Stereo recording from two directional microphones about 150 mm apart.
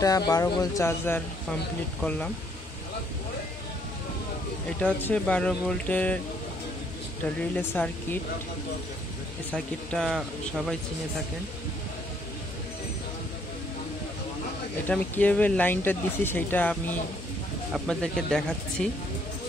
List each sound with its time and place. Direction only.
0.3 s speech: 25° left (ahead or behind); by 2.3 s 5° left (ahead or behind)
4.8 s speech: 10° left (ahead or behind)
7.5 s speech: 15° left (ahead or behind)
9.9 s speech: 5° left (ahead or behind)
14.9 s speech: 10° left (ahead or behind)